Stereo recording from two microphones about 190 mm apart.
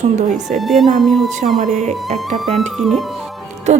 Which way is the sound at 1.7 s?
35° right (ahead or behind).